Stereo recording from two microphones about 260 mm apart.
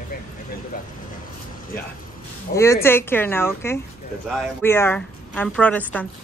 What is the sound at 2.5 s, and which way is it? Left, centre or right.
Speech, left.